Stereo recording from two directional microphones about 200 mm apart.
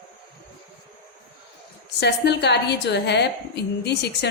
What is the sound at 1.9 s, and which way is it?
A woman's voice, 55° left (ahead or behind).